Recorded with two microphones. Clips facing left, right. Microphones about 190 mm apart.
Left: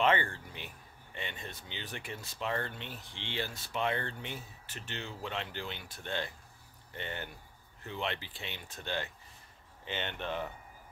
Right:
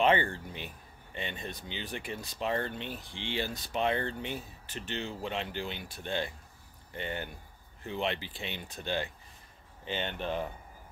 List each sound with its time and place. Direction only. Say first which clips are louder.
0.0 s speech: right 3 dB; 20° right (ahead or behind)
9.8 s speech: right 3 dB; 30° right (ahead or behind)